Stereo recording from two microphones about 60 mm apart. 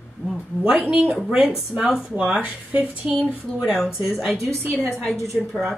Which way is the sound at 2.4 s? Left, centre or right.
Right.